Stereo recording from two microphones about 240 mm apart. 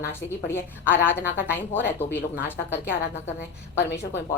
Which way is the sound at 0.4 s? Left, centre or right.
Centre.